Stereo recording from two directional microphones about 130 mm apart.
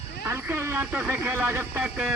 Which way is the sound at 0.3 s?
15° right (ahead or behind).